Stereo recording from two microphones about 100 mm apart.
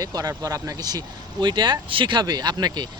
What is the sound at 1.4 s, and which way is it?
Speech, 50° right (ahead or behind).